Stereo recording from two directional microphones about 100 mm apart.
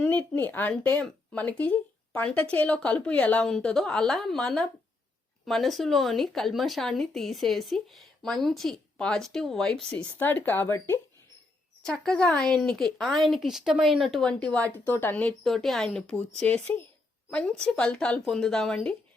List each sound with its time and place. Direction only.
0.0 s speech: 15° left (ahead or behind)
9.9 s a woman's voice: 15° left (ahead or behind)
11.8 s speech: 5° left (ahead or behind)
15.4 s speech: centre (ahead or behind)